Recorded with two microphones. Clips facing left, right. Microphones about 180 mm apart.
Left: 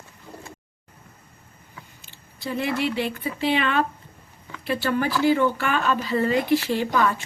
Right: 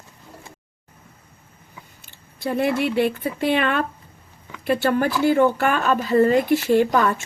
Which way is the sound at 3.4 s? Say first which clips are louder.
Right 2 dB; 50° right (ahead or behind).